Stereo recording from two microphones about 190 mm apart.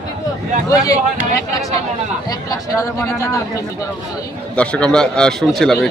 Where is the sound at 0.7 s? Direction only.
15° left (ahead or behind).